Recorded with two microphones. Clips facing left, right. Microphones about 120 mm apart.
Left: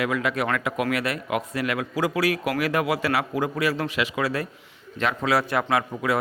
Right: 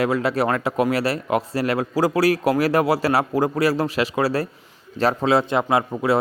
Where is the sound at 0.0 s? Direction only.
35° right (ahead or behind).